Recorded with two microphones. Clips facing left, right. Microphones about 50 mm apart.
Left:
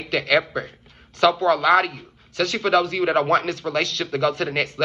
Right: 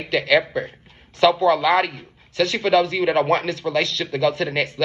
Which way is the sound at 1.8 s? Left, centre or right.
Right.